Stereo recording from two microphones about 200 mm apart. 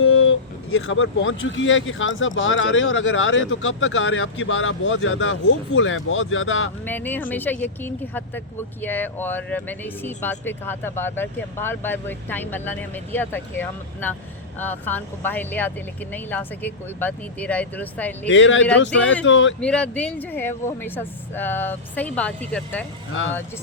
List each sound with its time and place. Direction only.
0.0 s speech: 90° left
6.8 s speech: 10° left (ahead or behind)
18.3 s speech: 70° left (ahead or behind)
19.5 s speech: 5° left (ahead or behind)